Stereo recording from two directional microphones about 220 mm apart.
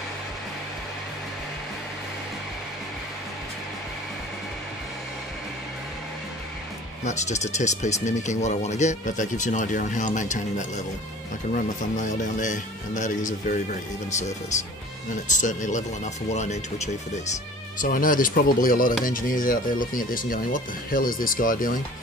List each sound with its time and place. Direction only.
7.1 s speech: 30° left (ahead or behind)
11.5 s speech: 35° left (ahead or behind)
15.2 s speech: 35° left (ahead or behind)